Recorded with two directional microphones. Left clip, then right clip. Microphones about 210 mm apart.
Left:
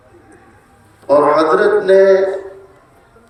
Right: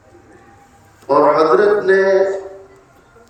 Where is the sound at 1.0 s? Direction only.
50° left (ahead or behind).